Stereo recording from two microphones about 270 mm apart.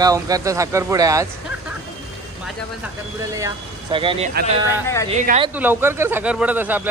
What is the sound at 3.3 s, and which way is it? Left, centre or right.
Speech, centre.